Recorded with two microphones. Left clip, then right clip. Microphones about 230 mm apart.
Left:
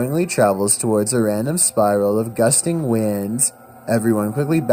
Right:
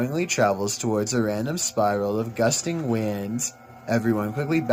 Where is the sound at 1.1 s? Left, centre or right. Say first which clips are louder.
Left 6 dB; left.